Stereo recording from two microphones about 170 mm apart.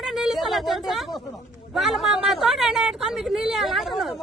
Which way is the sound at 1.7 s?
Centre (ahead or behind).